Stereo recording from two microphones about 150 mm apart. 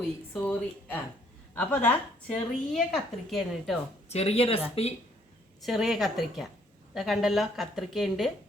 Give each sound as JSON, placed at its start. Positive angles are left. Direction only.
{"t": 0.3, "sound": "a woman's voice", "side_deg": 10}
{"t": 4.1, "sound": "speech", "side_deg": 45}
{"t": 5.6, "sound": "a woman's voice", "side_deg": 0}